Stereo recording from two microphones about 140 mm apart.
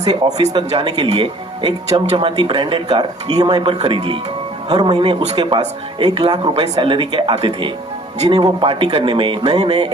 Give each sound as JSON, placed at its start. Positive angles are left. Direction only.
{"t": 0.0, "sound": "speech", "side_deg": -30}
{"t": 0.9, "sound": "speech", "side_deg": -40}